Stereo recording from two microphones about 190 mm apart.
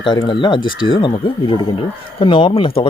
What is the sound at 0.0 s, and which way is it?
Speech, 25° left (ahead or behind).